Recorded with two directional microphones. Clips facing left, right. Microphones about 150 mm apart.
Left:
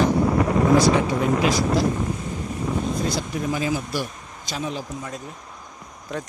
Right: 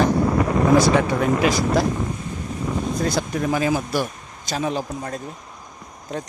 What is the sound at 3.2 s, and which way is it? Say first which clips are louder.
Speech: right 4 dB; 60° right (ahead or behind).